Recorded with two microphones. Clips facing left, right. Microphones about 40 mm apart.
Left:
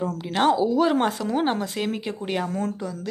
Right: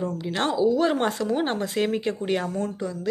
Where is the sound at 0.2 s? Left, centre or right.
Centre.